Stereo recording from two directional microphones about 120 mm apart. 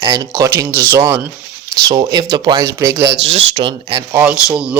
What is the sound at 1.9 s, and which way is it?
Speech, 35° right (ahead or behind).